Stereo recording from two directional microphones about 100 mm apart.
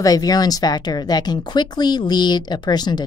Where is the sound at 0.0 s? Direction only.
40° left (ahead or behind).